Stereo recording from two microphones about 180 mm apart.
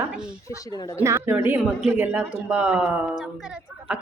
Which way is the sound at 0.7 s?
20° left (ahead or behind).